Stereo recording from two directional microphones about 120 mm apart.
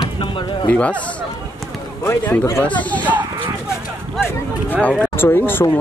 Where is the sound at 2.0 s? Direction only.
25° left (ahead or behind).